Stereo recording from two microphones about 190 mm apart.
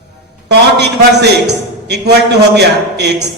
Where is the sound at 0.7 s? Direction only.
60° right (ahead or behind).